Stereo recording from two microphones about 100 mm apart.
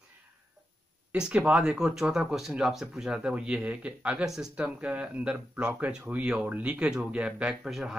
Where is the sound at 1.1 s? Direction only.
10° right (ahead or behind).